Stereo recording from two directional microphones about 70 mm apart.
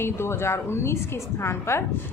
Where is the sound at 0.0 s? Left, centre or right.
Left.